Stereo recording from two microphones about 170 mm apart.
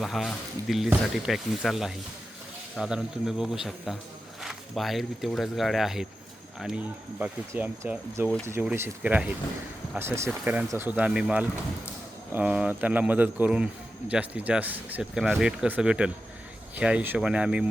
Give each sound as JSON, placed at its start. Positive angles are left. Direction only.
{"t": 0.0, "sound": "speech", "side_deg": 0}
{"t": 7.2, "sound": "speech", "side_deg": -10}